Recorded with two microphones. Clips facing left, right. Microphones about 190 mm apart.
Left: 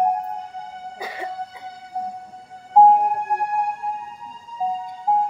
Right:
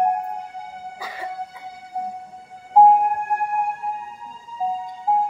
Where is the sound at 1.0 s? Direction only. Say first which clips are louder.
Left 5 dB; 25° left (ahead or behind).